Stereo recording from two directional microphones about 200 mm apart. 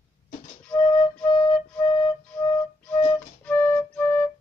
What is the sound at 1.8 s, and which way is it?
Flute, 25° left (ahead or behind).